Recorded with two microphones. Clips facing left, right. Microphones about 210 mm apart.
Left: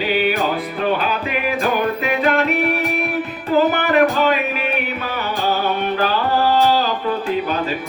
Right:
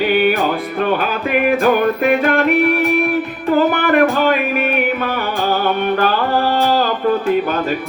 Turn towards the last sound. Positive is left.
turn(degrees=-50)  # may be behind; listen again after turning